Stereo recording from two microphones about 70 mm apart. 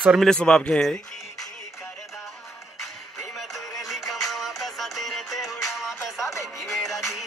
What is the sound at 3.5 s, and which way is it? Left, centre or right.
Music, centre.